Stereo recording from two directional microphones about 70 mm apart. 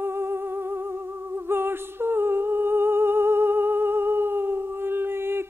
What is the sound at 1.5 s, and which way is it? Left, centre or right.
Humming, right.